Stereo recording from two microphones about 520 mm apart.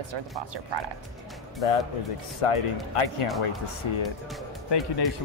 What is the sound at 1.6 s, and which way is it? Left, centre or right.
Speech, left.